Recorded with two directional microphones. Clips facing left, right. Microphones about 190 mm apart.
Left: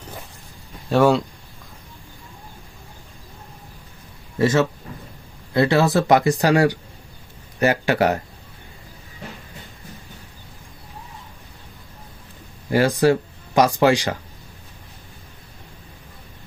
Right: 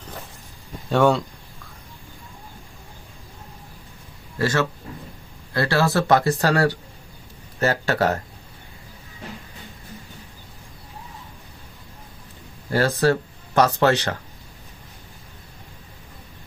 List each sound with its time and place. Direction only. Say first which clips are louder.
0.9 s speech: left 2 dB; 5° left (ahead or behind)
4.4 s speech: left 4 dB; 20° left (ahead or behind)
12.7 s speech: left 3 dB; 15° left (ahead or behind)